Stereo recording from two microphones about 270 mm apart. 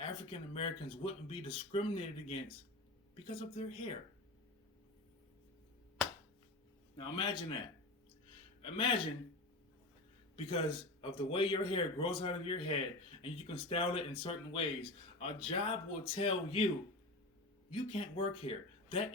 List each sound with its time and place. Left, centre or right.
0.0 s speech: left
6.9 s a man's voice: centre
8.6 s speech: centre
10.3 s speech: centre
17.7 s speech: left